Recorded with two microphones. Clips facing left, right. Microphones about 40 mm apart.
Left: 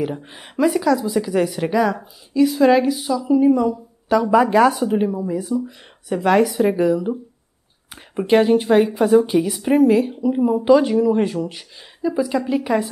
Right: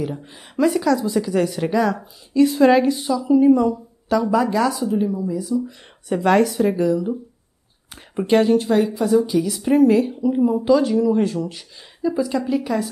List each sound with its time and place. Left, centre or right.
0.0 s speech: left
0.6 s speech: centre
2.4 s speech: centre
4.2 s speech: left
6.0 s speech: centre; by 7.2 s left
7.9 s speech: centre; by 9.5 s left
9.5 s speech: centre